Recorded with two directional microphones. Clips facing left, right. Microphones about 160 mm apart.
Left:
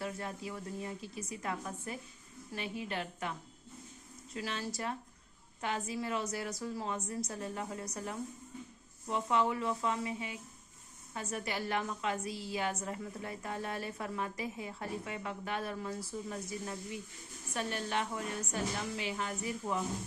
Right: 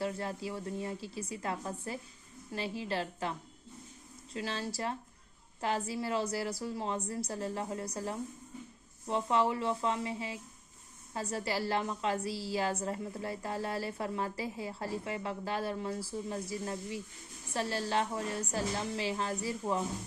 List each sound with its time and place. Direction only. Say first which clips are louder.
0.0 s a woman's voice: right 4 dB; 30° right (ahead or behind)
4.4 s a woman's voice: right 2 dB; 30° right (ahead or behind)